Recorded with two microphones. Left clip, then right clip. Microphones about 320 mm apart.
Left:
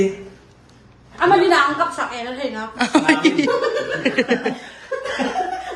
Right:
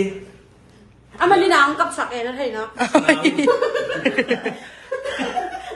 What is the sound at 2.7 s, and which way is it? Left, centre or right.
Speech, centre.